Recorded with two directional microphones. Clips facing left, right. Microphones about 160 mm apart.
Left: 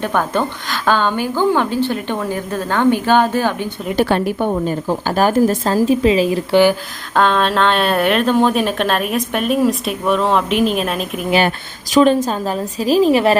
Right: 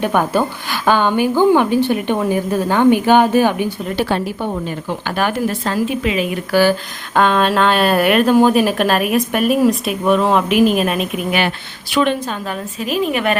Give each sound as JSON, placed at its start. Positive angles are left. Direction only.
{"t": 0.0, "sound": "a woman's voice", "side_deg": -15}
{"t": 3.9, "sound": "speech", "side_deg": 55}
{"t": 4.6, "sound": "a woman's voice", "side_deg": 40}
{"t": 7.1, "sound": "speech", "side_deg": -5}
{"t": 11.9, "sound": "a woman's voice", "side_deg": 35}